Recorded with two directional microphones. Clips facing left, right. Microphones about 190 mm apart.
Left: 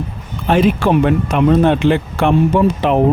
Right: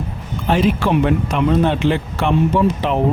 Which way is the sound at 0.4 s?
55° left (ahead or behind).